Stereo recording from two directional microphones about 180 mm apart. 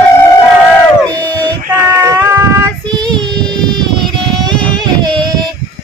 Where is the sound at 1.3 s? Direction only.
20° right (ahead or behind).